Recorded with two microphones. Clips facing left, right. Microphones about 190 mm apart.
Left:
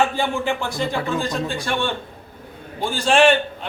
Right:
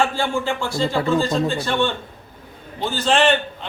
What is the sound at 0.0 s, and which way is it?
A man's voice, 20° left (ahead or behind).